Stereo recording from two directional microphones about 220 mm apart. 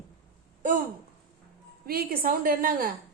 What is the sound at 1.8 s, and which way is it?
A woman's voice, 40° right (ahead or behind).